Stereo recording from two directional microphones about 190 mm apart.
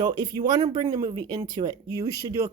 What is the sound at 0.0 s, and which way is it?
Speech, 25° right (ahead or behind).